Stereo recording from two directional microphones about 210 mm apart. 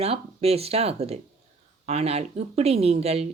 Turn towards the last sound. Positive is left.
turn(degrees=-30)  # may be behind; listen again after turning